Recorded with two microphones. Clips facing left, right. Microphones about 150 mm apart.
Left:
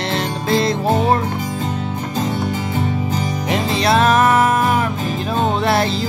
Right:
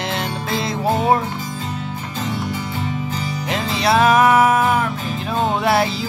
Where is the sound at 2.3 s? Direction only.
45° left (ahead or behind).